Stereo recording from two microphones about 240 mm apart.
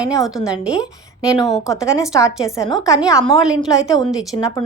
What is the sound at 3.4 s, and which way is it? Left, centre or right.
Speech, centre.